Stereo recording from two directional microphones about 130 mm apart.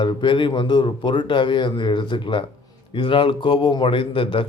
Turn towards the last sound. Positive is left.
turn(degrees=40)  # may be behind; listen again after turning